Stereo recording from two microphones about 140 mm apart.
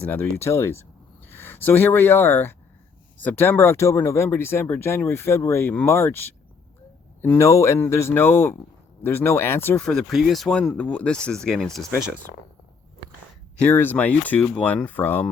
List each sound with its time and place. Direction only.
0.1 s speech: 10° left (ahead or behind)
9.8 s speech: centre (ahead or behind)
13.6 s speech: 10° left (ahead or behind)